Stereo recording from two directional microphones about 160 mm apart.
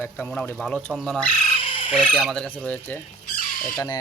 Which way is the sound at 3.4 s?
60° left (ahead or behind).